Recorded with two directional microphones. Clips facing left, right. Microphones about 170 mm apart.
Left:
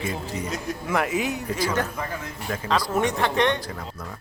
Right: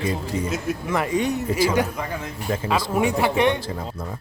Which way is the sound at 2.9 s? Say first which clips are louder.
Right 4 dB; 10° right (ahead or behind).